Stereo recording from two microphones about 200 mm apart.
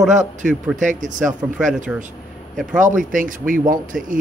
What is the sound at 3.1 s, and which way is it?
Speech, 40° right (ahead or behind).